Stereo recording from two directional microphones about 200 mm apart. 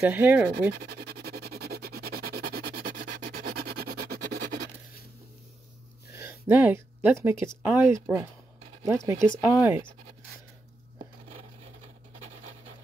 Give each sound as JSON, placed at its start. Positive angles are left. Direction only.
{"t": 0.0, "sound": "speech", "side_deg": -10}
{"t": 0.5, "sound": "music", "side_deg": -55}
{"t": 6.1, "sound": "speech", "side_deg": -15}